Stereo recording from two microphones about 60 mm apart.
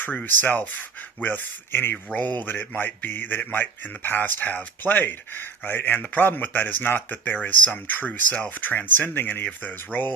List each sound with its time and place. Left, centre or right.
0.0 s speech: left